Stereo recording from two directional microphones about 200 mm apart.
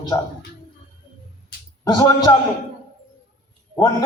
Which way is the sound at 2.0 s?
20° left (ahead or behind).